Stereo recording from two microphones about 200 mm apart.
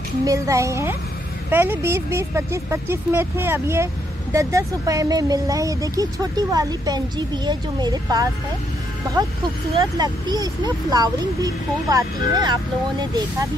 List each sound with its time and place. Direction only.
0.2 s speech: 15° right (ahead or behind)
9.8 s speech: 20° right (ahead or behind)